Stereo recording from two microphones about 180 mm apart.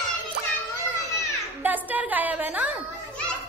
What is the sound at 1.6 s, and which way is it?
A woman's voice, 10° right (ahead or behind).